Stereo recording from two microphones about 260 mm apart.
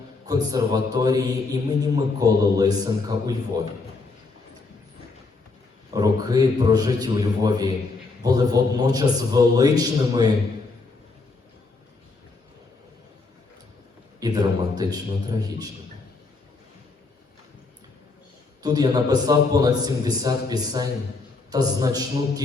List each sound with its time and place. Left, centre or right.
0.3 s a man's voice: centre
5.9 s a man's voice: centre
14.2 s a man's voice: centre
18.6 s a man's voice: centre